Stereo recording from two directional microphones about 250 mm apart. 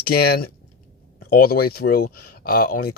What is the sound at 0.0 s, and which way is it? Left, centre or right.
Speech, left.